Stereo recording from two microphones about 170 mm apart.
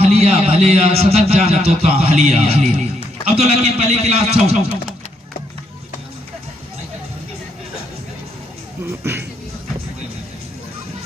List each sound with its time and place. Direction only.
0.0 s a man's voice: 35° right (ahead or behind)